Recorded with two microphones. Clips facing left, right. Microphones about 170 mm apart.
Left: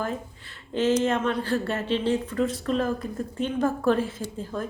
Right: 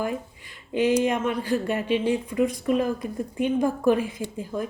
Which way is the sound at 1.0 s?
10° right (ahead or behind).